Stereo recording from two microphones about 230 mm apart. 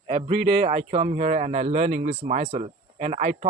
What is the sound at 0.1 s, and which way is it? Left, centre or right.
A man's voice, right.